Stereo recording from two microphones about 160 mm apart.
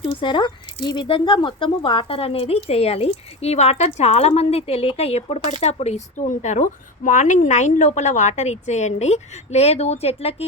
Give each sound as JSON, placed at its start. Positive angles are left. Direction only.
{"t": 0.0, "sound": "speech", "side_deg": 30}